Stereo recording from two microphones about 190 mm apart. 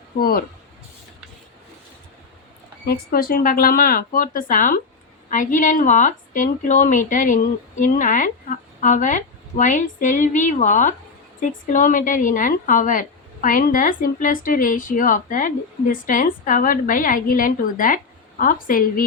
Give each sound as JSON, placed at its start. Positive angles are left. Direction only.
{"t": 0.2, "sound": "a woman's voice", "side_deg": 50}
{"t": 2.8, "sound": "a woman's voice", "side_deg": 55}